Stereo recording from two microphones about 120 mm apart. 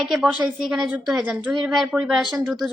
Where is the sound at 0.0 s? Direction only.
Centre (ahead or behind).